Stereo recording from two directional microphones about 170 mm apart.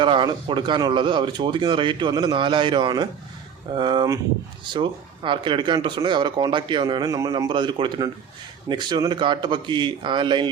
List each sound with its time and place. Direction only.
0.0 s speech: 30° right (ahead or behind)